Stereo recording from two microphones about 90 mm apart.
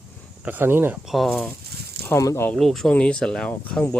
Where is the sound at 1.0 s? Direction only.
Centre (ahead or behind).